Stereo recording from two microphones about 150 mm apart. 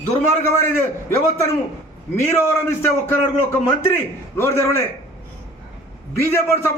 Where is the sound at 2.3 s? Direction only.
15° left (ahead or behind).